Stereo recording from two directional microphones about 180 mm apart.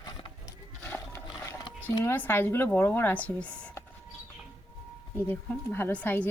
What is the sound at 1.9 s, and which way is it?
Speech, 10° left (ahead or behind).